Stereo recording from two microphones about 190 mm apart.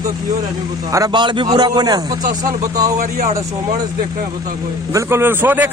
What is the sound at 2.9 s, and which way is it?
Speech, 40° right (ahead or behind).